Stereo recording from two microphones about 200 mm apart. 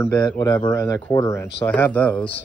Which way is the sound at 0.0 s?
15° left (ahead or behind).